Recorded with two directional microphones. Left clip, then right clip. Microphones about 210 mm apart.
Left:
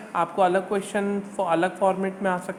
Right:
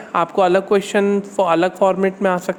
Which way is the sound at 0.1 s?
45° right (ahead or behind).